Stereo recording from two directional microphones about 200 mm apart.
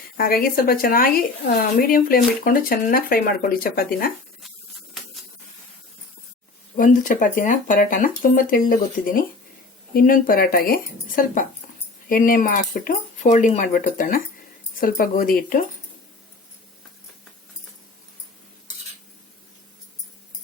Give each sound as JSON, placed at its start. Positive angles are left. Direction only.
{"t": 0.2, "sound": "speech", "side_deg": 45}
{"t": 6.7, "sound": "speech", "side_deg": 40}